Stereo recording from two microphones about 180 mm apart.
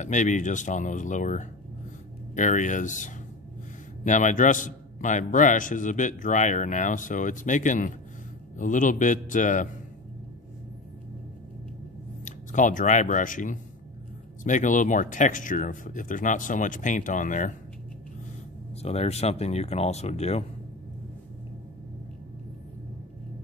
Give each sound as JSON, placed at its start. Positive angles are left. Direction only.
{"t": 0.0, "sound": "a man's voice", "side_deg": 40}
{"t": 12.3, "sound": "a man's voice", "side_deg": 45}
{"t": 18.8, "sound": "speech", "side_deg": 35}